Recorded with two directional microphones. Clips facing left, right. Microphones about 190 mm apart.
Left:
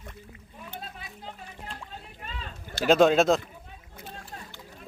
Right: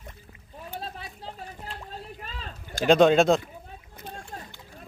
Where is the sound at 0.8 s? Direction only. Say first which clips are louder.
Right 6 dB; 35° right (ahead or behind).